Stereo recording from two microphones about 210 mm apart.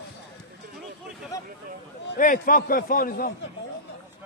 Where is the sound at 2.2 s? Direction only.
40° left (ahead or behind).